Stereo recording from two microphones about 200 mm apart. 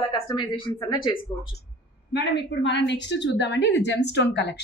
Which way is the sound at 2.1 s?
60° left (ahead or behind).